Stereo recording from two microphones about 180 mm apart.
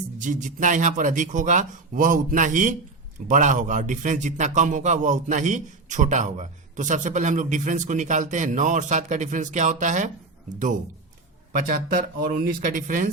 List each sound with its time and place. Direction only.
0.2 s a man's voice: 45° right (ahead or behind)
11.5 s a man's voice: 50° right (ahead or behind)